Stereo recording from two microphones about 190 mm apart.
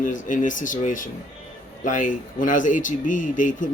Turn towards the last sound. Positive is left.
turn(degrees=45)  # may be behind; listen again after turning